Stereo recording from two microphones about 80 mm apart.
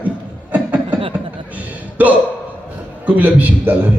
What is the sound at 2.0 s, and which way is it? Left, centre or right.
A man's voice, centre.